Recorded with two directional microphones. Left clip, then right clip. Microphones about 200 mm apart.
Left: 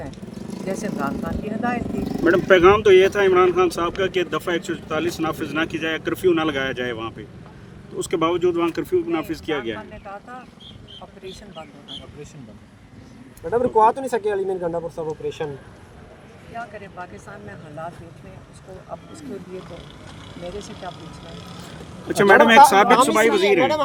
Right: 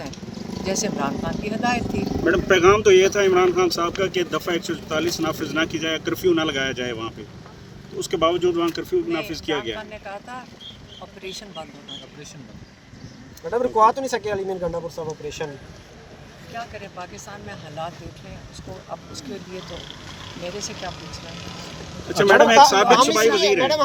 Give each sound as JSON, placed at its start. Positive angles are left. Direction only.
{"t": 0.7, "sound": "speech", "side_deg": -15}
{"t": 2.2, "sound": "speech", "side_deg": 50}
{"t": 9.9, "sound": "speech", "side_deg": -20}
{"t": 13.5, "sound": "speech", "side_deg": 25}
{"t": 20.5, "sound": "speech", "side_deg": -25}
{"t": 22.2, "sound": "speech", "side_deg": 50}
{"t": 23.0, "sound": "speech", "side_deg": 35}